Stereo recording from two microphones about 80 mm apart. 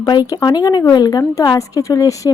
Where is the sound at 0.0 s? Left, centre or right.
Left.